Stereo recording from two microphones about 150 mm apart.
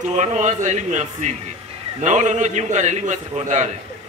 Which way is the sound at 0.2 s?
50° right (ahead or behind).